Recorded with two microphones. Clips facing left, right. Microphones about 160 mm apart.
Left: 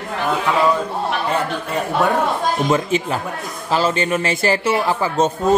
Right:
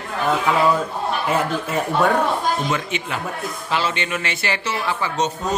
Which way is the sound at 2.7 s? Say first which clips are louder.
Left 6 dB; 35° left (ahead or behind).